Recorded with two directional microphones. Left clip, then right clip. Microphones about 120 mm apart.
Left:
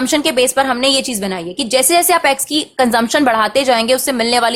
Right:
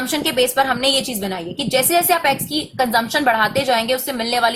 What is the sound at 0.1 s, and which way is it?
A woman's voice, 40° left (ahead or behind).